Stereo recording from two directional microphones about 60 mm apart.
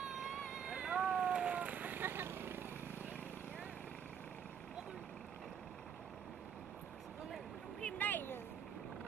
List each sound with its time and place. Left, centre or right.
0.1 s vehicle: centre; by 2.6 s right
8.0 s vehicle: left